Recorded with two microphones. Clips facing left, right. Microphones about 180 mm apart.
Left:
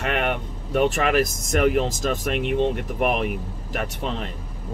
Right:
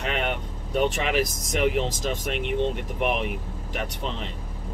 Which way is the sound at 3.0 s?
55° left (ahead or behind).